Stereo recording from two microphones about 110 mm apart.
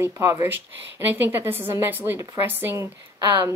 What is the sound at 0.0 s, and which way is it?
Speech, 25° right (ahead or behind).